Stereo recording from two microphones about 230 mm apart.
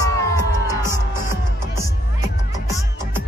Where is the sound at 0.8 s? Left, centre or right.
Centre.